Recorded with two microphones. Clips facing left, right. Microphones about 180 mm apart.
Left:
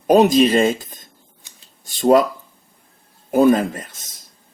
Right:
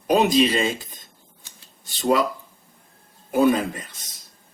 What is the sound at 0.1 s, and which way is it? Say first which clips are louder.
Speech: left 5 dB; 45° left (ahead or behind).